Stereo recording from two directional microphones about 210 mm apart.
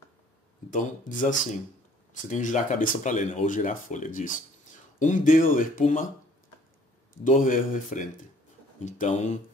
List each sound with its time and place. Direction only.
0.7 s speech: 35° left (ahead or behind)
7.2 s speech: 40° left (ahead or behind)